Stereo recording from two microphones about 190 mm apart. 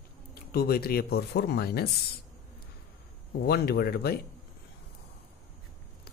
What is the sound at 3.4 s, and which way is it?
Speech, 55° left (ahead or behind).